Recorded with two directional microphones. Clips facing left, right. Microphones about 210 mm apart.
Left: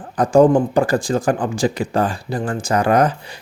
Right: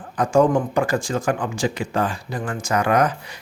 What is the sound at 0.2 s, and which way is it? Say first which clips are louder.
Speech: left 5 dB; 35° left (ahead or behind).